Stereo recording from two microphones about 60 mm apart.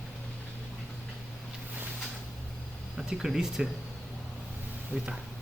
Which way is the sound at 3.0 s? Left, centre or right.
Centre.